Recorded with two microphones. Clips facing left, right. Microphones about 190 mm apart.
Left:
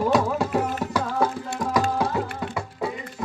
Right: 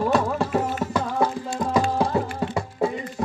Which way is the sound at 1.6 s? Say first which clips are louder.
Right 1 dB; 25° right (ahead or behind).